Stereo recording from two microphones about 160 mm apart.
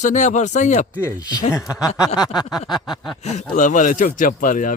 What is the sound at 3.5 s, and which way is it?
Speech, 50° left (ahead or behind).